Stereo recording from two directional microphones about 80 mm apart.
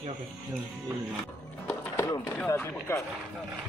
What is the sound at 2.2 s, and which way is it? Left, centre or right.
Speech, left.